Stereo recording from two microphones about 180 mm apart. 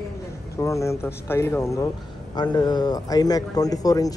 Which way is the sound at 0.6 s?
15° left (ahead or behind).